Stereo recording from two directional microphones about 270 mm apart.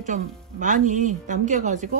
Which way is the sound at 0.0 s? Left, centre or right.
Right.